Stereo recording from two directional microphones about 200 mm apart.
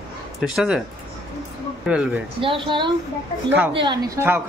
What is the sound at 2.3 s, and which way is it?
Speech, 25° right (ahead or behind).